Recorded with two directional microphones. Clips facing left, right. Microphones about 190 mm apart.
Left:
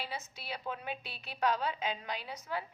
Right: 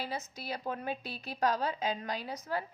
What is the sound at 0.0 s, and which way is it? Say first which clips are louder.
A woman's voice: right 4 dB; 40° right (ahead or behind).